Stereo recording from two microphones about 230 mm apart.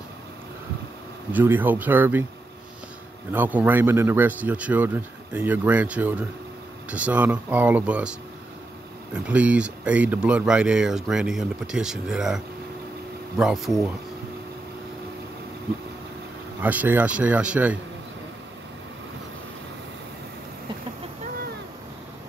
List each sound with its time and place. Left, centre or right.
1.3 s speech: centre
3.3 s speech: centre
13.4 s speech: centre
16.6 s speech: centre